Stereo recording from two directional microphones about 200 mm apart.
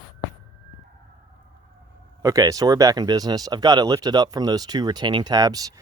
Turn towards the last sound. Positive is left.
turn(degrees=-20)  # may be behind; listen again after turning